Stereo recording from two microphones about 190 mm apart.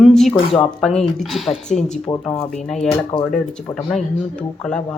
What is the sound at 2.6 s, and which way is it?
A woman's voice, centre (ahead or behind).